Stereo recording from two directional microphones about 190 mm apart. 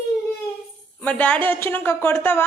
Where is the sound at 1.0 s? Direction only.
10° left (ahead or behind).